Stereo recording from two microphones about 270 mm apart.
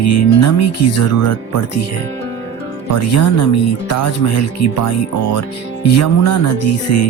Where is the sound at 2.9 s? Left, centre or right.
Left.